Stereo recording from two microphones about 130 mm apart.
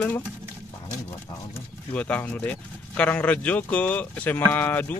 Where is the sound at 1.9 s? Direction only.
10° left (ahead or behind).